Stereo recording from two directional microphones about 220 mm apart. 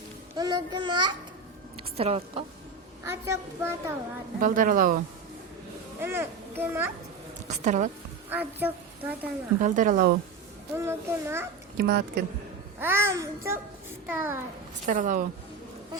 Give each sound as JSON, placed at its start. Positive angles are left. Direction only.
{"t": 0.3, "sound": "a child's voice", "side_deg": -20}
{"t": 3.0, "sound": "a child's voice", "side_deg": -10}
{"t": 4.4, "sound": "speech", "side_deg": -40}
{"t": 6.0, "sound": "a child's voice", "side_deg": -10}
{"t": 7.4, "sound": "a woman's voice", "side_deg": -30}
{"t": 8.3, "sound": "a child's voice", "side_deg": -10}
{"t": 9.6, "sound": "speech", "side_deg": -35}
{"t": 10.8, "sound": "a child's voice", "side_deg": -10}
{"t": 11.8, "sound": "speech", "side_deg": -45}
{"t": 12.8, "sound": "a child's voice", "side_deg": -10}
{"t": 14.8, "sound": "speech", "side_deg": -35}